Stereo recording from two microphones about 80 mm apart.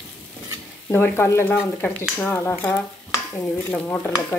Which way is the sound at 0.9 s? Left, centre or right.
Left.